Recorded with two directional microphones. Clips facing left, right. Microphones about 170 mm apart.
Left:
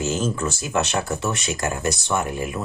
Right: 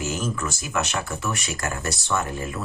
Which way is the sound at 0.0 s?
25° left (ahead or behind).